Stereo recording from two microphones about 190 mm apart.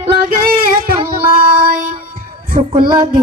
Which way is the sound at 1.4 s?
50° right (ahead or behind).